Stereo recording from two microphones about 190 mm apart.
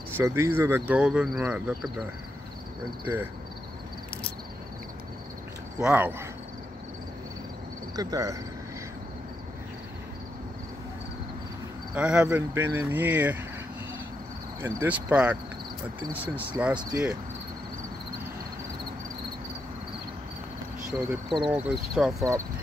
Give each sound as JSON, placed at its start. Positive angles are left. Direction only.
{"t": 0.2, "sound": "speech", "side_deg": -15}
{"t": 5.8, "sound": "speech", "side_deg": -5}
{"t": 7.9, "sound": "speech", "side_deg": -20}
{"t": 11.9, "sound": "speech", "side_deg": -5}
{"t": 14.6, "sound": "speech", "side_deg": -10}
{"t": 21.1, "sound": "speech", "side_deg": 0}